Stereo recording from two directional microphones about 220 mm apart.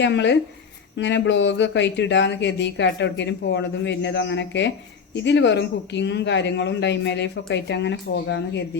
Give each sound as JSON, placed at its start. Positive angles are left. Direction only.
{"t": 0.0, "sound": "speech", "side_deg": 55}